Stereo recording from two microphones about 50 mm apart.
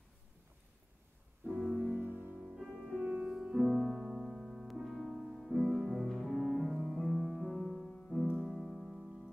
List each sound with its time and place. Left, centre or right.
1.4 s music: right
2.0 s music: right
2.4 s music: centre
3.0 s music: right
3.3 s music: centre